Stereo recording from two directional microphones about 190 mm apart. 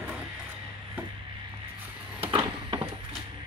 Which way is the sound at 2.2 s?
30° right (ahead or behind).